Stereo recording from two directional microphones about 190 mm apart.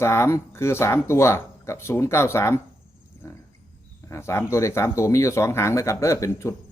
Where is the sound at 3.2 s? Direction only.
15° left (ahead or behind).